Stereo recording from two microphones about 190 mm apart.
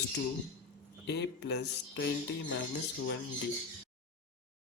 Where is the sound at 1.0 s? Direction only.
65° left (ahead or behind).